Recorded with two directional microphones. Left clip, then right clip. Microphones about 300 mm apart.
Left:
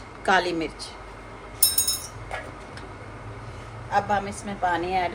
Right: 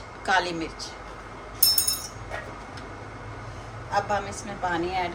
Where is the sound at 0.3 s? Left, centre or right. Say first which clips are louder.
Left 2 dB; left.